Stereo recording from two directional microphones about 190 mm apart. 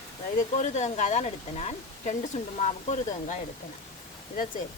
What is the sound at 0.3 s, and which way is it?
Speech, 40° left (ahead or behind).